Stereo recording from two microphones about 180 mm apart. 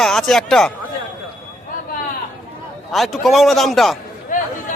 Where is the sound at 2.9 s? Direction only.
Centre (ahead or behind).